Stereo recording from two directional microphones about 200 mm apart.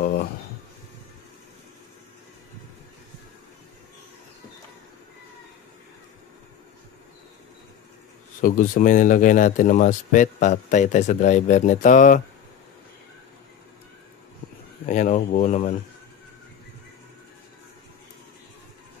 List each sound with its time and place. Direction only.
0.0 s a sound: 50° left (ahead or behind)
8.4 s speech: 40° left (ahead or behind)
14.9 s speech: 40° left (ahead or behind)